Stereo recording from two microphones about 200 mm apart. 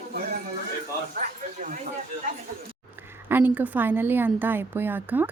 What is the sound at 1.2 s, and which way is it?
Speech, 40° right (ahead or behind).